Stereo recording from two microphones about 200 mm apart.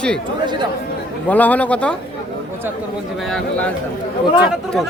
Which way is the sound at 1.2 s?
10° left (ahead or behind).